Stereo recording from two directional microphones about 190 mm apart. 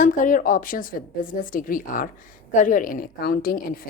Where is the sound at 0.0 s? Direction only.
45° left (ahead or behind).